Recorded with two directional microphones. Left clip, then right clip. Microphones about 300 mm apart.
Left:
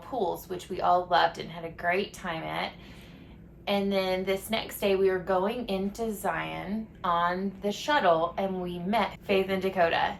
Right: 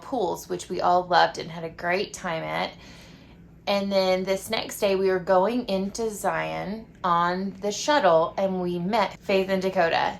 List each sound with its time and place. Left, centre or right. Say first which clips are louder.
0.1 s a woman's voice: right 4 dB; right
3.7 s a woman's voice: right 5 dB; centre